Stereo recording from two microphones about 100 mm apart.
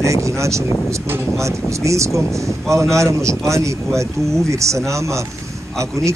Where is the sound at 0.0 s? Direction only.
30° right (ahead or behind).